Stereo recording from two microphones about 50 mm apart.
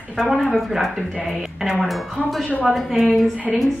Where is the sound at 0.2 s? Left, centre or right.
Centre.